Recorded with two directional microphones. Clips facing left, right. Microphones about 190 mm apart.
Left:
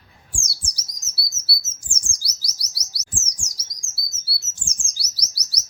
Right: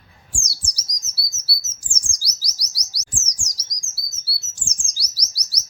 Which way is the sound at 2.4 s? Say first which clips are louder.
Right 1 dB; 55° left (ahead or behind).